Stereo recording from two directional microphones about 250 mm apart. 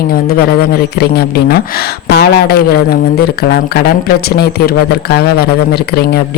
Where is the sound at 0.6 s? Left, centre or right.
Left.